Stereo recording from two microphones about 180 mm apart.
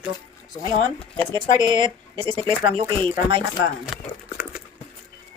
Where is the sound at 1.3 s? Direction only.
25° right (ahead or behind).